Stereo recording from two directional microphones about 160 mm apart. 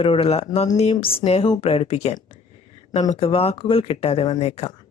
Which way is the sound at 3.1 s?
35° left (ahead or behind).